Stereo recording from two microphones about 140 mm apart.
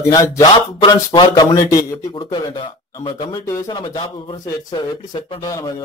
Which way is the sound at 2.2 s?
35° left (ahead or behind).